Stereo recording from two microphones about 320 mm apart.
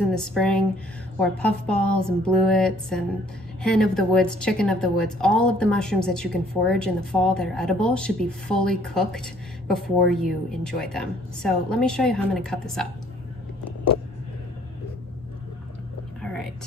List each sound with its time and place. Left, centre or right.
0.1 s a woman's voice: centre